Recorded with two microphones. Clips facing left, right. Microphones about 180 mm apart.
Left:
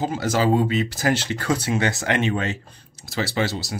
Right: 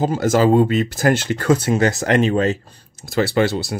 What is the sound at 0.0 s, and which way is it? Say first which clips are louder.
Speech: right 6 dB; 45° right (ahead or behind).